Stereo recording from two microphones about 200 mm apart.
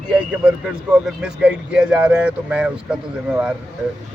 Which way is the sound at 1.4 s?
5° right (ahead or behind).